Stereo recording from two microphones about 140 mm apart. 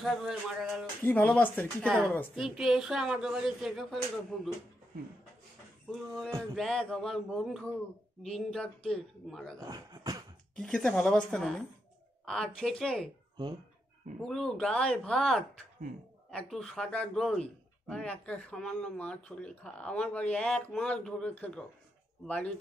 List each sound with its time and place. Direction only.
0.0 s a woman's voice: centre (ahead or behind)
1.0 s a man's voice: 10° left (ahead or behind)
2.3 s a woman's voice: centre (ahead or behind)
6.5 s a woman's voice: 5° left (ahead or behind)
9.6 s speech: 25° right (ahead or behind)
10.6 s a woman's voice: 5° left (ahead or behind)
14.2 s a woman's voice: 5° left (ahead or behind)